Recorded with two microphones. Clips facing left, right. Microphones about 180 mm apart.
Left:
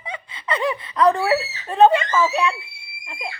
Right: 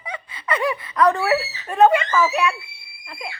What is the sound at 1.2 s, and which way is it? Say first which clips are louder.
A child's voice: even; 30° left (ahead or behind).